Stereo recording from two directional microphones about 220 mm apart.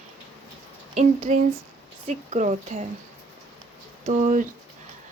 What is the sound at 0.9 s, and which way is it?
Speech, 35° right (ahead or behind).